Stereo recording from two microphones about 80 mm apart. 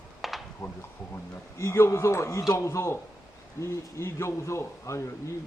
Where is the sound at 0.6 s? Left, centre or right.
Left.